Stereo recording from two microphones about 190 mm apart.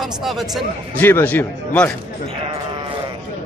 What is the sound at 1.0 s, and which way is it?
Speech, 10° left (ahead or behind).